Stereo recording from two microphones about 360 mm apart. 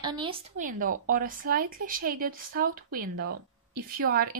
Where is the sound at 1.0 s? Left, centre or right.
Right.